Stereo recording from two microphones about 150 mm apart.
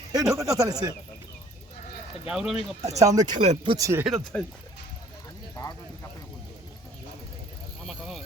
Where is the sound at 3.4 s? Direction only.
40° right (ahead or behind).